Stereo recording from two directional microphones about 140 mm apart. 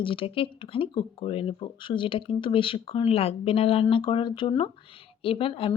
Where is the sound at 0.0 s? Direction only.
40° left (ahead or behind).